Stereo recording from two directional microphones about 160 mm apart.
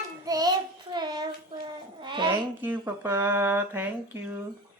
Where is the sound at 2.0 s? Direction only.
30° right (ahead or behind).